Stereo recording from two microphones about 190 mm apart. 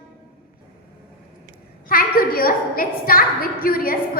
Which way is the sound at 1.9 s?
50° left (ahead or behind).